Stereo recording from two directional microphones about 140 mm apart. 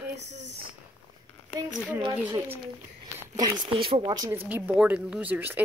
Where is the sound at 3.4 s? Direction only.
30° right (ahead or behind).